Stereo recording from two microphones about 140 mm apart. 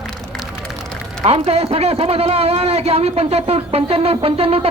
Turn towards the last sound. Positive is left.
turn(degrees=-45)  # may be behind; listen again after turning